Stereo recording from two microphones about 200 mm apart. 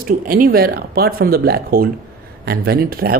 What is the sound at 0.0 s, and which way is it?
Speech, 45° right (ahead or behind).